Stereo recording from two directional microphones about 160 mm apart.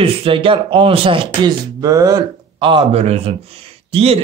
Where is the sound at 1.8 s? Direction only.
20° right (ahead or behind).